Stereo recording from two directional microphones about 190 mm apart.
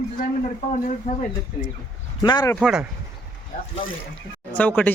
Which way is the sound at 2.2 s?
20° left (ahead or behind).